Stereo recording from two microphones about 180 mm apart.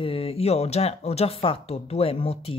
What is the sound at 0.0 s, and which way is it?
Speech, 30° left (ahead or behind).